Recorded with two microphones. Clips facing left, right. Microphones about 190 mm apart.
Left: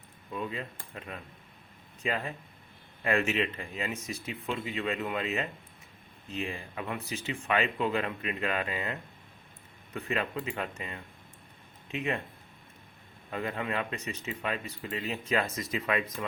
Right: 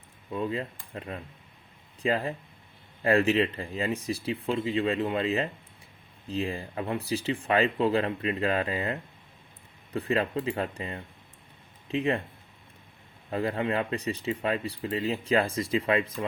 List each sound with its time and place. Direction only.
0.3 s speech: 30° right (ahead or behind)
13.3 s speech: 30° right (ahead or behind)